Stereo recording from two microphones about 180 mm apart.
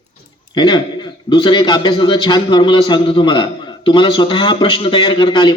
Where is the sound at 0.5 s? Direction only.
25° left (ahead or behind).